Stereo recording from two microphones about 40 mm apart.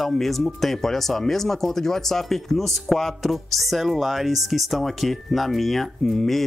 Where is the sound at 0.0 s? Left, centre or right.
Centre.